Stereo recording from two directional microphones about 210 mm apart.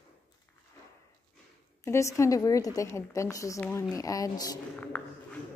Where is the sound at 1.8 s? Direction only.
15° left (ahead or behind).